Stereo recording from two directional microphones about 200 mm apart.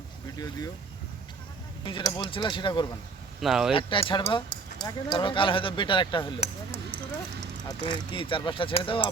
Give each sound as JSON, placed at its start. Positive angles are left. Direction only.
{"t": 0.3, "sound": "speech", "side_deg": 20}
{"t": 1.8, "sound": "speech", "side_deg": 25}
{"t": 3.4, "sound": "speech", "side_deg": 0}
{"t": 3.7, "sound": "speech", "side_deg": 25}